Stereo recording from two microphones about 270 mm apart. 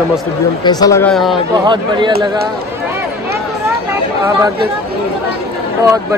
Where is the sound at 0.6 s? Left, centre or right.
Centre.